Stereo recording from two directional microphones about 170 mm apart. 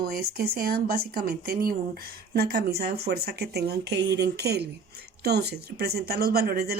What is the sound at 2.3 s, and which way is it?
A woman's voice, 65° right (ahead or behind).